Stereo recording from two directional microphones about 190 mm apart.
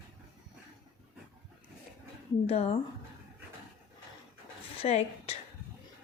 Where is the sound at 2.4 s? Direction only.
30° left (ahead or behind).